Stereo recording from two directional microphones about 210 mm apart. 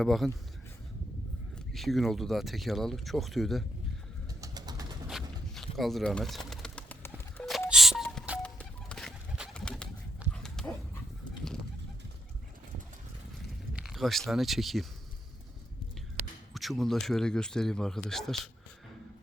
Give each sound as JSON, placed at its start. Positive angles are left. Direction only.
{"t": 0.0, "sound": "speech", "side_deg": 0}
{"t": 1.5, "sound": "speech", "side_deg": 0}
{"t": 4.4, "sound": "bird", "side_deg": -15}
{"t": 5.0, "sound": "bird", "side_deg": 0}
{"t": 7.7, "sound": "music", "side_deg": 0}
{"t": 8.4, "sound": "bird", "side_deg": 5}
{"t": 10.2, "sound": "dog", "side_deg": 0}
{"t": 13.7, "sound": "speech", "side_deg": 0}
{"t": 16.6, "sound": "speech", "side_deg": 0}